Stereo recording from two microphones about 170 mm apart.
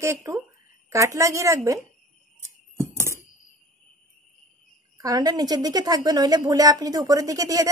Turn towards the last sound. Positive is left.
turn(degrees=-20)  # may be behind; listen again after turning